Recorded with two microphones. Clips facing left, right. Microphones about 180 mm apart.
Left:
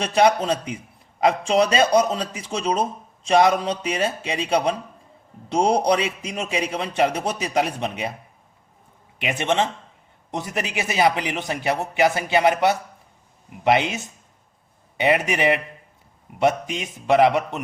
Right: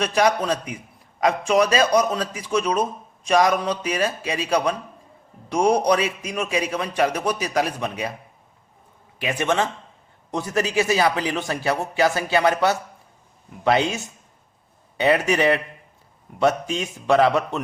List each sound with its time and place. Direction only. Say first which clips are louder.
0.0 s a man's voice: left 2 dB; 30° left (ahead or behind)
9.2 s a man's voice: even; 20° left (ahead or behind)